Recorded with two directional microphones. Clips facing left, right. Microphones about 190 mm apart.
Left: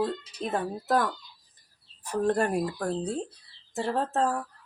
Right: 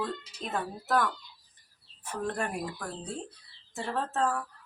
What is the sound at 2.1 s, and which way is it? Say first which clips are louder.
Speech: left 8 dB; 40° left (ahead or behind).